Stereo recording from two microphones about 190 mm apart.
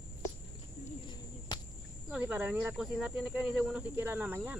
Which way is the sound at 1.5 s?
25° left (ahead or behind).